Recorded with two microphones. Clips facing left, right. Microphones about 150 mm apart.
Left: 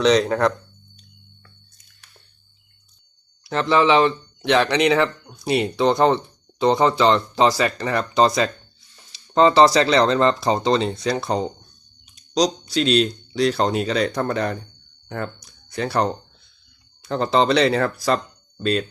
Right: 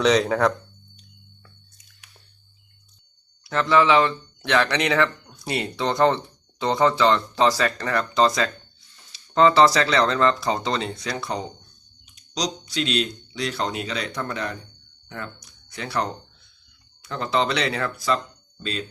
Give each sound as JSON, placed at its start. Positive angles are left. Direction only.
{"t": 0.0, "sound": "speech", "side_deg": 0}
{"t": 3.5, "sound": "speech", "side_deg": 25}
{"t": 7.4, "sound": "speech", "side_deg": 15}
{"t": 18.5, "sound": "speech", "side_deg": 55}